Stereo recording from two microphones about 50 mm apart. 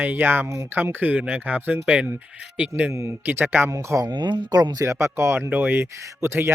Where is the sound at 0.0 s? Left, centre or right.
Right.